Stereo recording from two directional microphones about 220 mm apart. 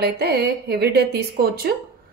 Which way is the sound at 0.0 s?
45° right (ahead or behind).